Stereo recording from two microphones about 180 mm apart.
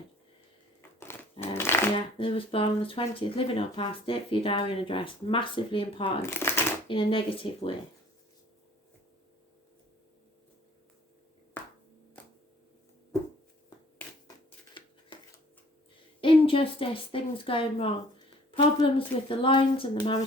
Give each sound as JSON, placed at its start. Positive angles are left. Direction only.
{"t": 0.8, "sound": "a sound", "side_deg": 15}
{"t": 1.5, "sound": "shuffling cards", "side_deg": 15}
{"t": 2.0, "sound": "speech", "side_deg": 30}
{"t": 6.2, "sound": "shuffling cards", "side_deg": 15}
{"t": 6.8, "sound": "speech", "side_deg": 30}
{"t": 14.7, "sound": "a sound", "side_deg": 25}
{"t": 16.2, "sound": "a woman's voice", "side_deg": 30}